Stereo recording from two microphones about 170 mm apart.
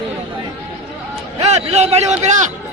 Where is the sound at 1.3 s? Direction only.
40° right (ahead or behind).